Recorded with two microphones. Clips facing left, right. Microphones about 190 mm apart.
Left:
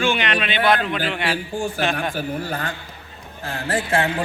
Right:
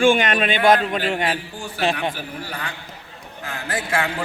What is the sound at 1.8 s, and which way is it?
Speech, 30° right (ahead or behind).